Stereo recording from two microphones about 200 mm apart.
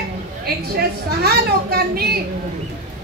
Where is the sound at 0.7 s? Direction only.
50° right (ahead or behind).